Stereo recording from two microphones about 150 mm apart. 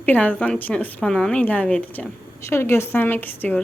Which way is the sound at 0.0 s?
10° left (ahead or behind).